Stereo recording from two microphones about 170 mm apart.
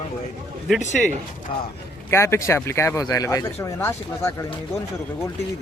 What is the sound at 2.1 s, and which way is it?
Speech, 15° left (ahead or behind).